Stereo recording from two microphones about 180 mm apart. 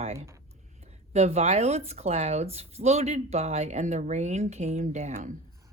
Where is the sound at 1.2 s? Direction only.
35° right (ahead or behind).